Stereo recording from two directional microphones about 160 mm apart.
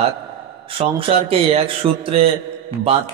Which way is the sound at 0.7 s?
35° right (ahead or behind).